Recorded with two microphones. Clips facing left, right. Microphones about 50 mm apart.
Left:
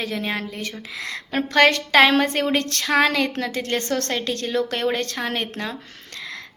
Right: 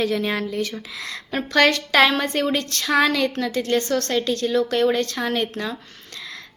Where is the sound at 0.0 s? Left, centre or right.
Left.